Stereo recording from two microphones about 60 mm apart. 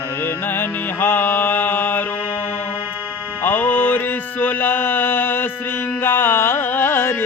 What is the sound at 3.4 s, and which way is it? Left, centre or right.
Music, left.